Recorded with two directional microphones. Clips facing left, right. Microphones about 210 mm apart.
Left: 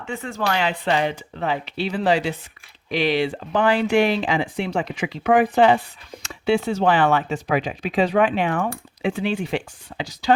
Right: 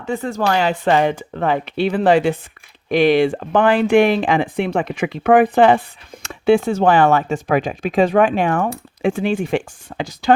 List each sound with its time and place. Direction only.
0.0 s speech: 40° right (ahead or behind)